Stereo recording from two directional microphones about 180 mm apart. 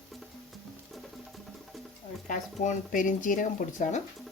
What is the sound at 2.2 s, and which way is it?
Speech, 45° left (ahead or behind).